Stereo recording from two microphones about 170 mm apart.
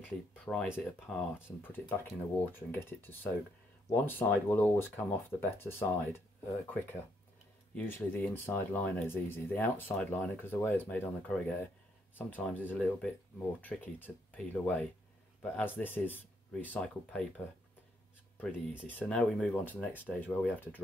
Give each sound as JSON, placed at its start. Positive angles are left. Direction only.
{"t": 0.5, "sound": "speech", "side_deg": 10}
{"t": 18.9, "sound": "speech", "side_deg": 10}